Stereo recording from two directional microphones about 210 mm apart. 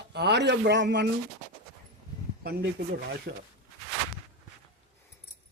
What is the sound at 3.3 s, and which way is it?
Speech, 50° right (ahead or behind).